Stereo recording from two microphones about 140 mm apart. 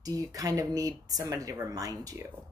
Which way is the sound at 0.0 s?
25° right (ahead or behind).